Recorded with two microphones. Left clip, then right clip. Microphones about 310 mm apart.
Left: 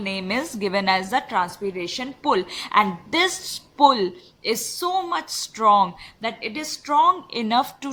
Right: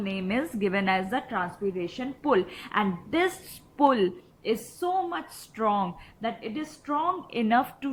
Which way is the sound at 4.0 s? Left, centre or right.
Left.